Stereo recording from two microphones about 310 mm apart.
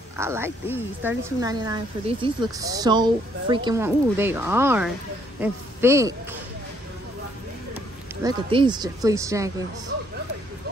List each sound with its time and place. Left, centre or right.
0.2 s speech: centre
8.2 s speech: centre